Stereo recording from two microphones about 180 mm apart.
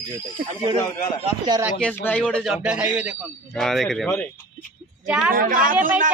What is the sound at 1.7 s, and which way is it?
A man's voice, 5° left (ahead or behind).